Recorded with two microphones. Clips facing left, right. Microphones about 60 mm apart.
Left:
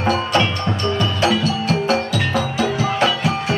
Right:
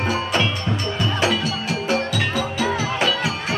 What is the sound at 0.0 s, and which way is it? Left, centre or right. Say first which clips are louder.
Music: left 4 dB; centre.